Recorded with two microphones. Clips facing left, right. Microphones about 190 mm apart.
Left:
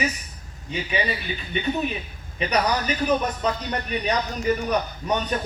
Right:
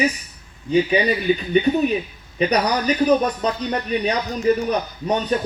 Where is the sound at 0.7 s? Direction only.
35° right (ahead or behind).